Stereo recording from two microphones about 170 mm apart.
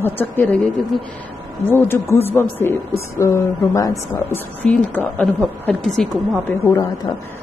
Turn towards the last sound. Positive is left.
turn(degrees=20)  # may be behind; listen again after turning